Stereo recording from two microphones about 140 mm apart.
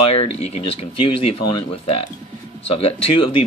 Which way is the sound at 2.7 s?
40° left (ahead or behind).